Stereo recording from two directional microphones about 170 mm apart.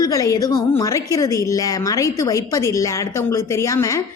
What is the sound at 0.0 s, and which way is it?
A woman's voice, 20° left (ahead or behind).